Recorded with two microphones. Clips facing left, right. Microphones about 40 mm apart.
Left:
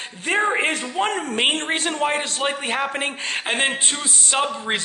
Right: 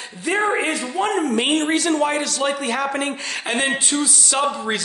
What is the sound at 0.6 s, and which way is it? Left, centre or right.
A man's voice, left.